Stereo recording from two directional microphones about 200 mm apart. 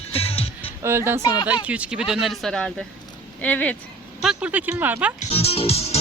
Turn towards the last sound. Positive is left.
turn(degrees=30)  # may be behind; listen again after turning